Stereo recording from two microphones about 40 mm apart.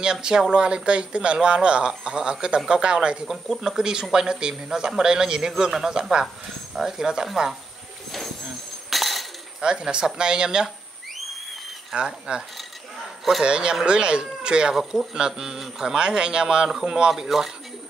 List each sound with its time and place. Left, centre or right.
0.0 s speech: centre
3.3 s speech: centre
3.7 s speech: centre
8.9 s a sound: centre
9.6 s speech: right
11.9 s speech: right
14.7 s speech: centre
17.3 s speech: centre